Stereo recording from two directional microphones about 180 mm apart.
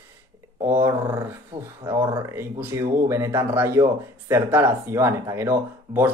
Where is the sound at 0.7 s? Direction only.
15° right (ahead or behind).